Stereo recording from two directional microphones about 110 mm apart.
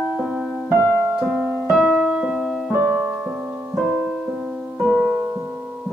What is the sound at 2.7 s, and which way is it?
Music, 15° right (ahead or behind).